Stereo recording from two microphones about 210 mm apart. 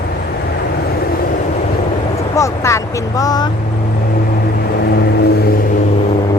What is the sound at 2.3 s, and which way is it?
Speech, 15° left (ahead or behind).